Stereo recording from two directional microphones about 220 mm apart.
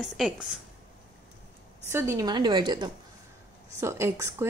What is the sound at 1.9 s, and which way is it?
A woman's voice, 10° right (ahead or behind).